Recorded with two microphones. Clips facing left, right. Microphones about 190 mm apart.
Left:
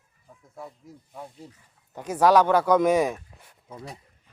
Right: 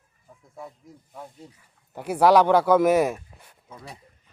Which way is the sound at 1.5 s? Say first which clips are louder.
Right 1 dB; 10° right (ahead or behind).